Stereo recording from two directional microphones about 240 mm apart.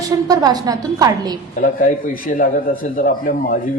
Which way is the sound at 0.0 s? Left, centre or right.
Centre.